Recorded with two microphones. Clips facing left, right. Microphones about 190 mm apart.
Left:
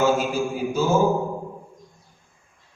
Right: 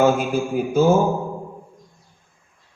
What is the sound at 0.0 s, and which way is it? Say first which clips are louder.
Speech: right 3 dB; 55° right (ahead or behind).